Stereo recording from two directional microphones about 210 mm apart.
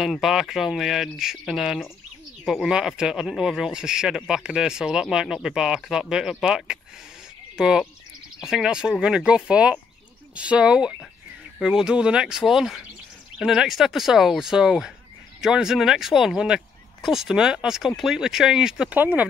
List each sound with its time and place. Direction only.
0.0 s speech: centre (ahead or behind)